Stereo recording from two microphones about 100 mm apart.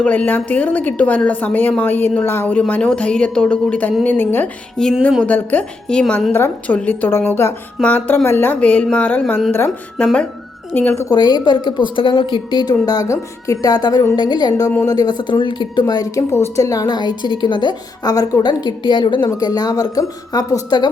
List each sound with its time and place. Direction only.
0.0 s a woman's voice: 15° left (ahead or behind)
4.8 s a woman's voice: 5° left (ahead or behind); by 9.7 s 25° left (ahead or behind)
10.0 s a woman's voice: 10° left (ahead or behind)
11.1 s speech: 45° left (ahead or behind)
12.8 s a woman's voice: 40° left (ahead or behind); by 19.3 s 55° left (ahead or behind)
19.3 s a woman's voice: 40° left (ahead or behind)